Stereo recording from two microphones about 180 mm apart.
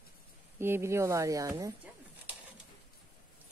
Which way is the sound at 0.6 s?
15° right (ahead or behind).